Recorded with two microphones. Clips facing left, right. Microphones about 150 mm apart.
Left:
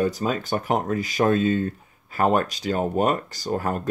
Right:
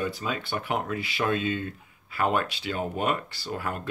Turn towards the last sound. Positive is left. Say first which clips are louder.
# left 7 dB
turn(degrees=40)  # may be behind; listen again after turning